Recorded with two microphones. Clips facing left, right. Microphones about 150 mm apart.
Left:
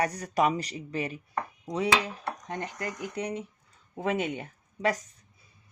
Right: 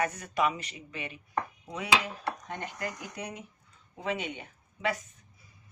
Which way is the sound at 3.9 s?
50° left (ahead or behind).